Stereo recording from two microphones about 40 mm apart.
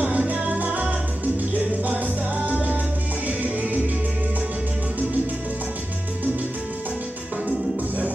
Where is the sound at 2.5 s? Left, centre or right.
Right.